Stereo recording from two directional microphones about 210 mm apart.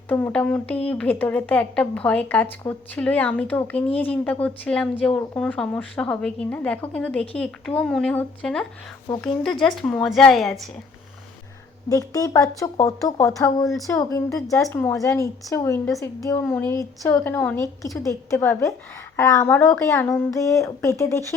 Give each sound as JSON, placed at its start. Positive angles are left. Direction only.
{"t": 0.1, "sound": "a woman's voice", "side_deg": 10}
{"t": 11.9, "sound": "speech", "side_deg": 15}